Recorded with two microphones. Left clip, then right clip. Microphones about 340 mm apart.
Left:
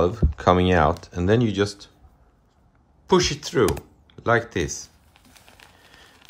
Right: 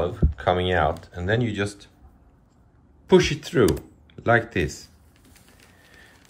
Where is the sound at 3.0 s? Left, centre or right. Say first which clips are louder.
Right 1 dB; centre.